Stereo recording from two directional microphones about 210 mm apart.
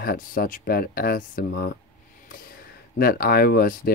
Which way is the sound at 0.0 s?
45° left (ahead or behind).